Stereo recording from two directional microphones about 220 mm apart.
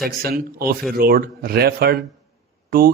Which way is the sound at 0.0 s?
45° right (ahead or behind).